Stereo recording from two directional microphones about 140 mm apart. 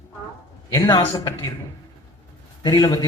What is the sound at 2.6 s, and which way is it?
Speech, 25° left (ahead or behind).